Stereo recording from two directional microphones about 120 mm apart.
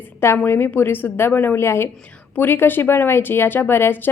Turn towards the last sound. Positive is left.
turn(degrees=15)  # may be behind; listen again after turning